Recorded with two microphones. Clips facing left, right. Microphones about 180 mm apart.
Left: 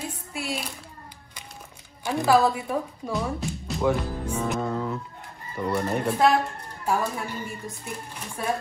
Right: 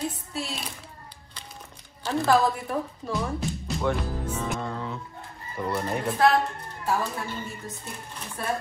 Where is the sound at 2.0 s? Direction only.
10° left (ahead or behind).